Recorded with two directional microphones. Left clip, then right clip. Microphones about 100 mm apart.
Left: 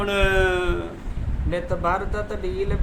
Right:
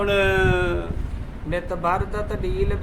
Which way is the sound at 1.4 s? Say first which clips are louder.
Even; 35° right (ahead or behind).